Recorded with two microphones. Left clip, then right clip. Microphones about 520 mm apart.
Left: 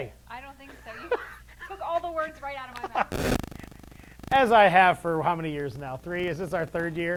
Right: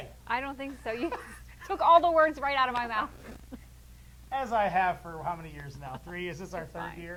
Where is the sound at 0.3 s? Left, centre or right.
Right.